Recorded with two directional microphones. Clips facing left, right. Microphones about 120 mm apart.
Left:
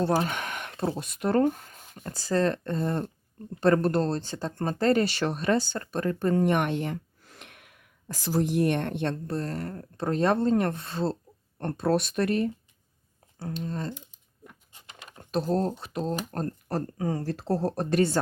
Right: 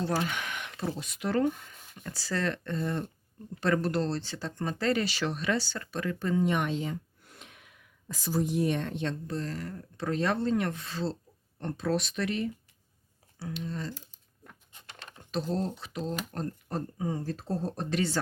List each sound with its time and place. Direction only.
0.2 s speech: 45° left (ahead or behind)
13.9 s speech: 20° left (ahead or behind)
14.4 s a sound: 10° left (ahead or behind)
15.2 s speech: 50° left (ahead or behind)
16.6 s speech: 75° left (ahead or behind); by 18.2 s 55° left (ahead or behind)